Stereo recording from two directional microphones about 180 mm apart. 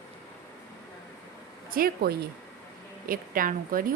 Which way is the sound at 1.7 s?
55° right (ahead or behind).